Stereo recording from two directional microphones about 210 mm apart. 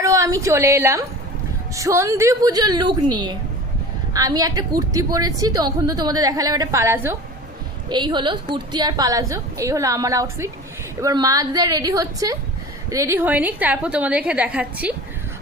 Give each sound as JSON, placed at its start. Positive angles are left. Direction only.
{"t": 0.0, "sound": "a woman's voice", "side_deg": -15}